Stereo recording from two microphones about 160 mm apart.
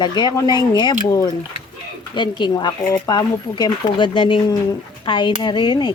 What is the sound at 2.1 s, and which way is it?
Speech, 30° left (ahead or behind).